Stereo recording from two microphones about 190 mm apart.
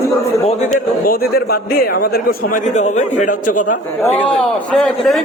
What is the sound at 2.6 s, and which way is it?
A man's voice, 40° left (ahead or behind).